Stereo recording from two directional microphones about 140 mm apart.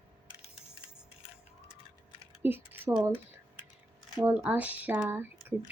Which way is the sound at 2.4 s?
15° right (ahead or behind).